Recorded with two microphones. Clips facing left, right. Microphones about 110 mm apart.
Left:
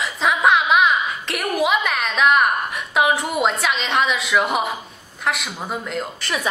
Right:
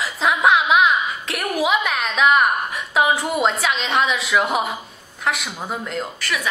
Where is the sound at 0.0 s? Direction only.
Centre (ahead or behind).